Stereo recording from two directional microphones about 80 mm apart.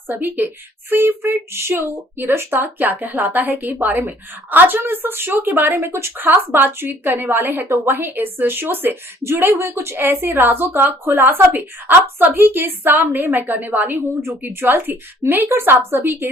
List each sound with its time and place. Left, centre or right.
0.1 s speech: right